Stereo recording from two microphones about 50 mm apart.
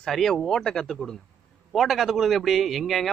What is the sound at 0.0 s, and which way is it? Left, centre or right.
A man's voice, centre.